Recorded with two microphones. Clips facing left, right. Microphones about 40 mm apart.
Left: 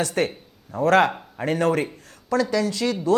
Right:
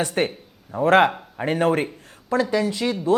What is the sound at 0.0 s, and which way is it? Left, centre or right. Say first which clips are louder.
Speech: right 1 dB; right.